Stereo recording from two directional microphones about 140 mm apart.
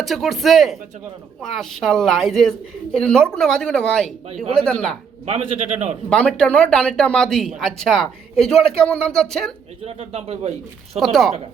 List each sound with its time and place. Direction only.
0.0 s speech: centre (ahead or behind)
5.2 s a man's voice: 50° right (ahead or behind)
6.1 s speech: 5° left (ahead or behind)
9.8 s a man's voice: 45° right (ahead or behind)
10.9 s speech: centre (ahead or behind)